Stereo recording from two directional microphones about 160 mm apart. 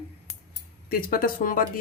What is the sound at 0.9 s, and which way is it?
Speech, 65° left (ahead or behind).